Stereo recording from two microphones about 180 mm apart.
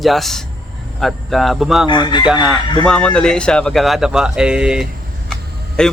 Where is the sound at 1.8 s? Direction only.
25° left (ahead or behind).